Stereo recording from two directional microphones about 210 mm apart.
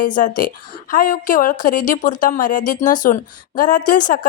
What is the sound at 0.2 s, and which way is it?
Speech, 40° left (ahead or behind).